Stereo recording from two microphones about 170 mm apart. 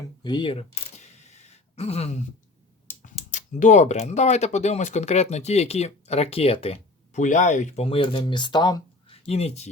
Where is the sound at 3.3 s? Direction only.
45° left (ahead or behind); by 9.1 s 25° left (ahead or behind).